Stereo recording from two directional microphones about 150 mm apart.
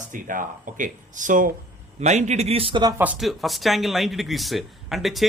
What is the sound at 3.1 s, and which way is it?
Speech, centre (ahead or behind).